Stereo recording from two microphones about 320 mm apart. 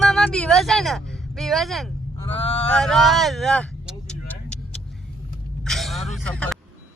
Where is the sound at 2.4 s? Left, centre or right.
Centre.